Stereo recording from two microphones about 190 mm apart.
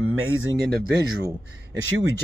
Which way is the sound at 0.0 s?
90° right.